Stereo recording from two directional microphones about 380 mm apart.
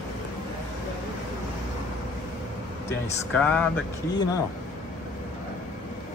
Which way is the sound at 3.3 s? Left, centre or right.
Centre.